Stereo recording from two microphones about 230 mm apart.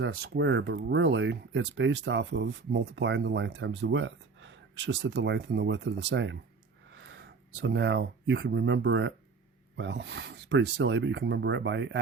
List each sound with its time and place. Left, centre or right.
0.0 s speech: right